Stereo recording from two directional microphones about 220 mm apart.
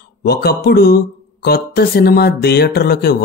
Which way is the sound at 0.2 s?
45° left (ahead or behind).